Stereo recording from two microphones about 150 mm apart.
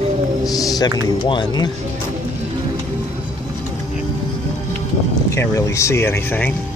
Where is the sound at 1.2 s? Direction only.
30° left (ahead or behind).